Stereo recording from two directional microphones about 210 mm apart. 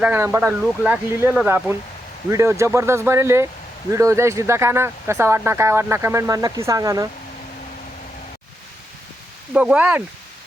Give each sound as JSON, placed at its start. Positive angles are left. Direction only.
{"t": 0.0, "sound": "speech", "side_deg": -10}
{"t": 9.5, "sound": "speech", "side_deg": -5}